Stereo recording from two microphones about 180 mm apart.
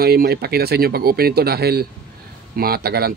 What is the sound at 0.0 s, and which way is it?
Speech, 60° right (ahead or behind).